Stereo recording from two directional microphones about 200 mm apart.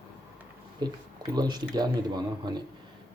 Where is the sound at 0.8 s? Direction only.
20° right (ahead or behind).